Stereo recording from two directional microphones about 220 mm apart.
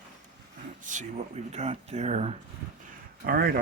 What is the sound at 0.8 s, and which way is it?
Speech, 35° right (ahead or behind).